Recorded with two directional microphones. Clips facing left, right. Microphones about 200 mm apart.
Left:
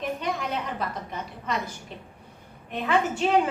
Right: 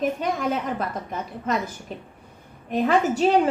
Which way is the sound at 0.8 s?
50° right (ahead or behind).